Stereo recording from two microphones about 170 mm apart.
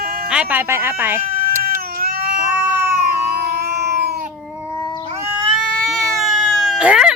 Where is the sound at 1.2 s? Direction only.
55° right (ahead or behind).